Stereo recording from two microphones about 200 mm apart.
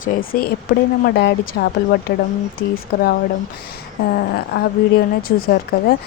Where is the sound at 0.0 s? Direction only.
45° left (ahead or behind).